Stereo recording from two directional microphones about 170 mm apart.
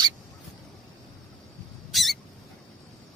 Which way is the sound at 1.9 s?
Centre (ahead or behind).